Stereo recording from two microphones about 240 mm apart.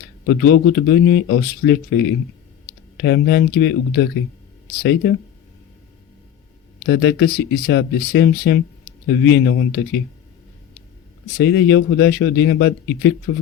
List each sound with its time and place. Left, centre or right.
0.3 s a man's voice: left
6.8 s a man's voice: left
11.3 s a man's voice: left